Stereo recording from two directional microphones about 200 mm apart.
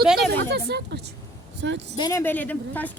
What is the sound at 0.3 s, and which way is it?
Speech, 55° right (ahead or behind).